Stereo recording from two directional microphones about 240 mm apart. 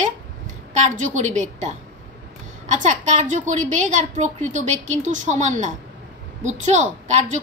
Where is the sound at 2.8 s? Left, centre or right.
Right.